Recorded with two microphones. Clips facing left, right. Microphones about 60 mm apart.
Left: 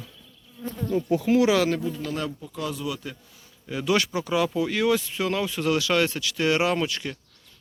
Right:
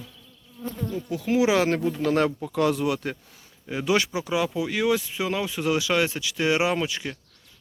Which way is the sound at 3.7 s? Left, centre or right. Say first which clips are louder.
Even; right.